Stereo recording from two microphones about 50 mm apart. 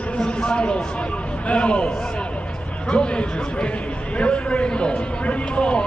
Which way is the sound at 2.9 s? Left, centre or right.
Left.